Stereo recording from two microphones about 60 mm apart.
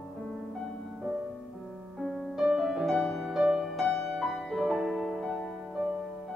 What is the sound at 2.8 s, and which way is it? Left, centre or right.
Music, centre.